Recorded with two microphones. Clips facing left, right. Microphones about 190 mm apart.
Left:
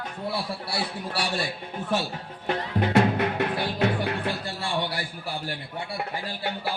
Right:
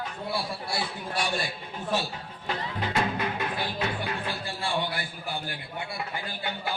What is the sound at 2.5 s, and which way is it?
Music, 60° left (ahead or behind).